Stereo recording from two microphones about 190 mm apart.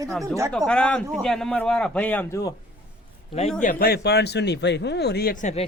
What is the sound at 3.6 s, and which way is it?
Speech, 50° left (ahead or behind).